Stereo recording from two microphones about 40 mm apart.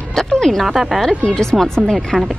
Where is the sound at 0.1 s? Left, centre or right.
Centre.